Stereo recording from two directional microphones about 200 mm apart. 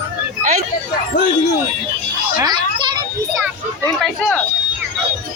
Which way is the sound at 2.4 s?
20° right (ahead or behind).